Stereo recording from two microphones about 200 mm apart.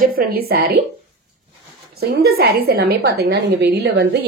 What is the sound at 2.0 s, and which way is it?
A woman's voice, 50° right (ahead or behind).